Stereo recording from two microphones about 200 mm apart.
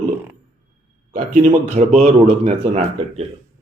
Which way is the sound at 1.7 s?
35° right (ahead or behind).